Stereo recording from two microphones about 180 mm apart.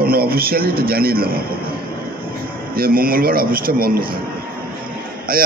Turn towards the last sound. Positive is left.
turn(degrees=-50)  # may be behind; listen again after turning